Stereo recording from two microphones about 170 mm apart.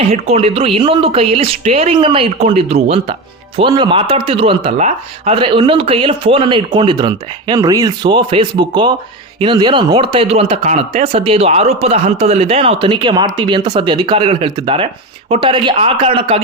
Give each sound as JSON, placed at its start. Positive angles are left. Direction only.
{"t": 0.1, "sound": "speech", "side_deg": -35}
{"t": 3.6, "sound": "a man's voice", "side_deg": -25}